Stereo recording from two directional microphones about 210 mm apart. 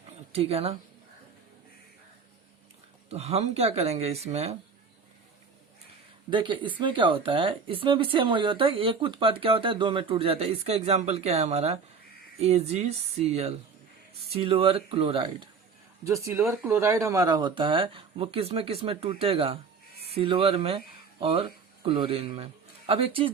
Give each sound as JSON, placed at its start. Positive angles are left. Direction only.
{"t": 0.3, "sound": "speech", "side_deg": -30}
{"t": 3.1, "sound": "speech", "side_deg": -30}
{"t": 6.3, "sound": "speech", "side_deg": -20}
{"t": 16.0, "sound": "speech", "side_deg": -15}